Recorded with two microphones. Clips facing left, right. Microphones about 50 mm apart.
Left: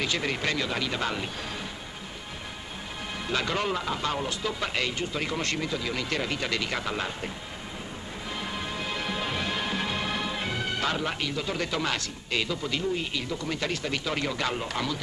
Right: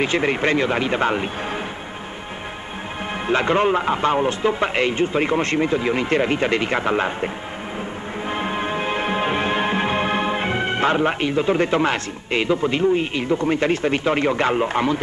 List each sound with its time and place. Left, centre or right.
0.0 s speech: right
3.3 s speech: right
8.3 s music: right